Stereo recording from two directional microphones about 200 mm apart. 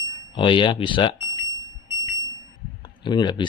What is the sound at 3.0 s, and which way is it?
Speech, 20° left (ahead or behind).